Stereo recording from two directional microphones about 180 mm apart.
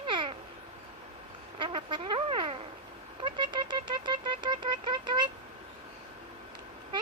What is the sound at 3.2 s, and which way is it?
Speech, 25° right (ahead or behind).